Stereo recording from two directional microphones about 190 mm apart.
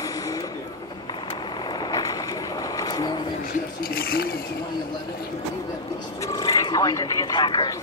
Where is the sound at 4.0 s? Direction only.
50° left (ahead or behind).